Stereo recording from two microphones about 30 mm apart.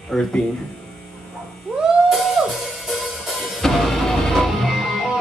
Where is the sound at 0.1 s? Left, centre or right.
Centre.